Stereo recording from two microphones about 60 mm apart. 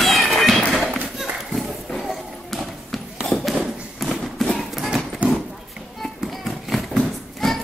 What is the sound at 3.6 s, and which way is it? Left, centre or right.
Thump, centre.